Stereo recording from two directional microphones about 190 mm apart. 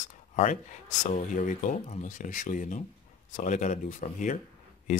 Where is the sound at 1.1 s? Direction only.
40° left (ahead or behind).